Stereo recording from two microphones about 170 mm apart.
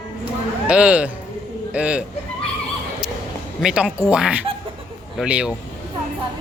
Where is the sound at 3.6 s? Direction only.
5° right (ahead or behind).